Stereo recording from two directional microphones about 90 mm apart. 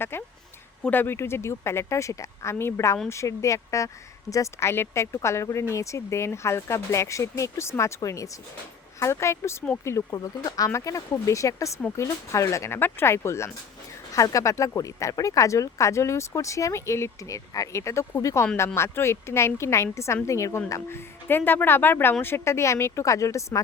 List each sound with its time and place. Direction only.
0.0 s a woman's voice: 25° left (ahead or behind)
10.2 s speech: 45° left (ahead or behind)
10.7 s a woman's voice: 35° left (ahead or behind)
21.2 s a woman's voice: 25° left (ahead or behind)